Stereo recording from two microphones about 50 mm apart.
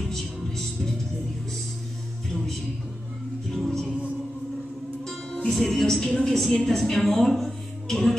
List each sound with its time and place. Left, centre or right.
0.0 s music: centre
3.4 s music: centre
5.5 s a woman's voice: centre